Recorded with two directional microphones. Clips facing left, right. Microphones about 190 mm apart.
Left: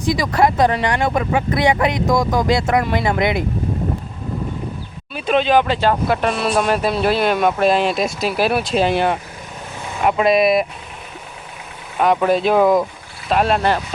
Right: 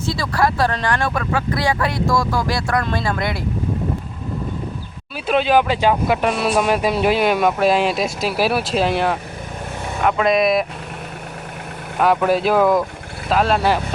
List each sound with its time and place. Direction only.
0.0 s speech: 15° left (ahead or behind)
5.1 s speech: 5° right (ahead or behind)
11.9 s speech: centre (ahead or behind)